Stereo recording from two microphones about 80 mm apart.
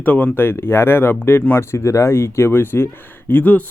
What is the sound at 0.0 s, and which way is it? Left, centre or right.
A man's voice, left.